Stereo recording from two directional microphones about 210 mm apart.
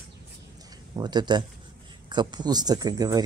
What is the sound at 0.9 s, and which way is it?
Speech, 20° right (ahead or behind).